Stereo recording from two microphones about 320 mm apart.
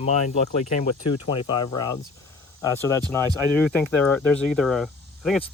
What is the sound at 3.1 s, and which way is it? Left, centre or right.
Speech, centre.